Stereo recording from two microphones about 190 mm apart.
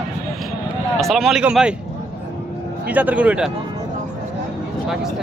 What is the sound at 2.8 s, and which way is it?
Speech, 10° right (ahead or behind).